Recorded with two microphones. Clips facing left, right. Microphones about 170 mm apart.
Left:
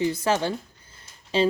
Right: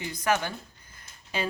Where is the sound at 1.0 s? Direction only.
30° left (ahead or behind).